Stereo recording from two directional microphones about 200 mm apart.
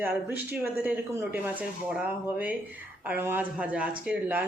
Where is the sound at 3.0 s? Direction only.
10° right (ahead or behind).